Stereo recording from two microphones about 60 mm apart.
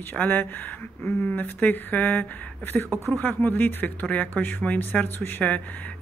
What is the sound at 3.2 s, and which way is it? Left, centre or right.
Speech, left.